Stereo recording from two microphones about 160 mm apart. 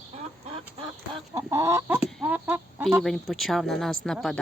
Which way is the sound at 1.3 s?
20° right (ahead or behind).